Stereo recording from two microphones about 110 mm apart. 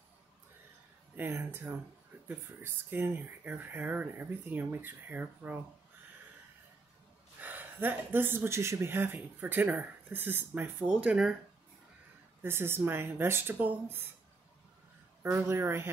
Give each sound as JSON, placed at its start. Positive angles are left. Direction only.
{"t": 1.1, "sound": "speech", "side_deg": -20}
{"t": 7.3, "sound": "speech", "side_deg": -15}
{"t": 12.4, "sound": "speech", "side_deg": -20}
{"t": 15.3, "sound": "speech", "side_deg": -20}